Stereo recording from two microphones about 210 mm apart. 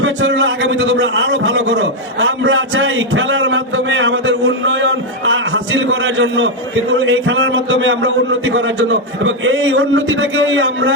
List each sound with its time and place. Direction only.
0.0 s a man's voice: 65° right (ahead or behind)